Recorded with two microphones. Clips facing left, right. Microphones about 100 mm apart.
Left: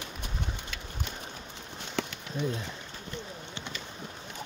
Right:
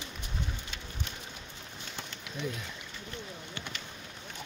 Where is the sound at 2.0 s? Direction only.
90° left.